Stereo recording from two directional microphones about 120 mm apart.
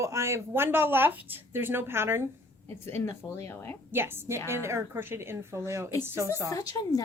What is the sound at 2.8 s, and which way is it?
Speech, 20° left (ahead or behind).